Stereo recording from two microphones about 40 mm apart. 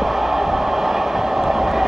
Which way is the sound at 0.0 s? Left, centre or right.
Centre.